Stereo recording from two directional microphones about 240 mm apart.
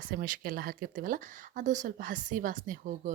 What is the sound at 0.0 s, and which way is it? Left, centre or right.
Speech, right.